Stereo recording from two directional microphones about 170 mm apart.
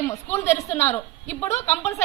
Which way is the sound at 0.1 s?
15° left (ahead or behind).